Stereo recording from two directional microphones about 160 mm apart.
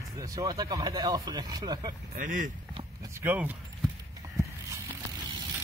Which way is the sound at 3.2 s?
10° right (ahead or behind).